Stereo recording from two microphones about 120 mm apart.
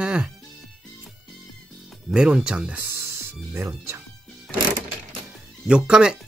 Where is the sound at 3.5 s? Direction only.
20° right (ahead or behind).